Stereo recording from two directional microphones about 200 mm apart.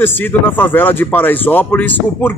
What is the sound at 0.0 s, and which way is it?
Speech, 10° left (ahead or behind).